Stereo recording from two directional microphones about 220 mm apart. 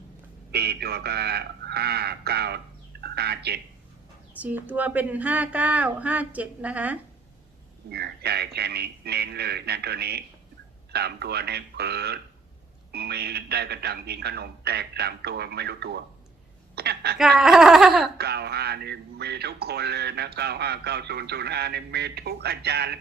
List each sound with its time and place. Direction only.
0.5 s speech: 45° right (ahead or behind)
4.4 s speech: 5° right (ahead or behind)
7.9 s a woman's voice: 45° right (ahead or behind)
17.2 s speech: centre (ahead or behind)
18.2 s speech: 45° right (ahead or behind)